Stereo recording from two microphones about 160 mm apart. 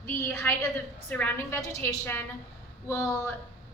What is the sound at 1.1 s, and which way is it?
A woman's voice, 15° left (ahead or behind).